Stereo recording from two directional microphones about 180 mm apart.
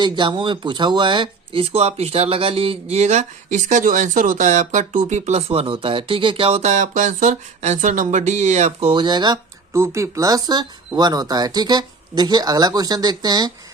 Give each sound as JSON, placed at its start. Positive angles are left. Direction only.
{"t": 0.0, "sound": "speech", "side_deg": -25}